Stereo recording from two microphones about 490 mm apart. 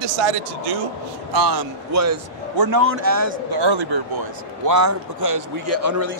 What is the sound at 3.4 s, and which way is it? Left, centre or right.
Speech, right.